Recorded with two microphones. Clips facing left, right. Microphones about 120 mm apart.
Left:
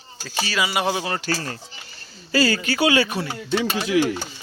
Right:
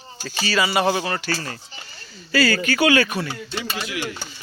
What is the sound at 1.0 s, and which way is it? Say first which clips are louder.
Speech: right 1 dB; 20° left (ahead or behind).